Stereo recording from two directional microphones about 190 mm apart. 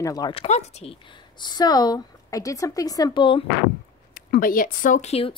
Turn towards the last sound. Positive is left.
turn(degrees=35)  # may be behind; listen again after turning